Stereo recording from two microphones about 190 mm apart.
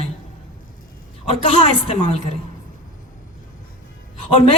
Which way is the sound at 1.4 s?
30° left (ahead or behind).